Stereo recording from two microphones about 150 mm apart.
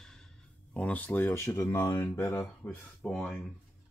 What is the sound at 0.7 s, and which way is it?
Speech, 10° left (ahead or behind).